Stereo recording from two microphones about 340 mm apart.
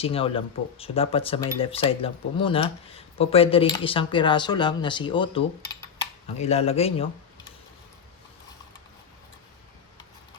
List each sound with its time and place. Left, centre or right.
0.0 s speech: centre